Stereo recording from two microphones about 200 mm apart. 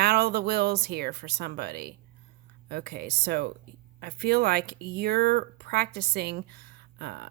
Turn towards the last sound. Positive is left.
turn(degrees=-55)  # may be behind; listen again after turning